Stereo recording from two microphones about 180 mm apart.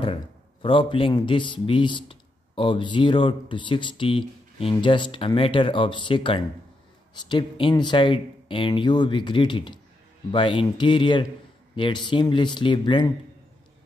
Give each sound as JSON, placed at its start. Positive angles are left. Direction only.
{"t": 0.0, "sound": "a man's voice", "side_deg": 30}